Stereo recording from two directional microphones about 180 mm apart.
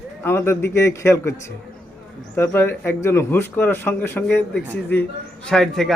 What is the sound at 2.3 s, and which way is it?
A man's voice, 15° left (ahead or behind).